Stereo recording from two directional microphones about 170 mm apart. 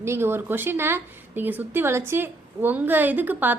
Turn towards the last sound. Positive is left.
turn(degrees=-10)  # may be behind; listen again after turning